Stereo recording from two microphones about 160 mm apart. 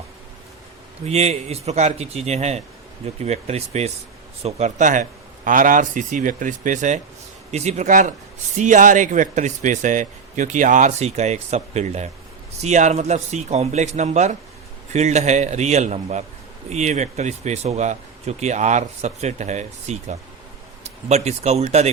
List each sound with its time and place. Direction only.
1.0 s speech: 40° right (ahead or behind)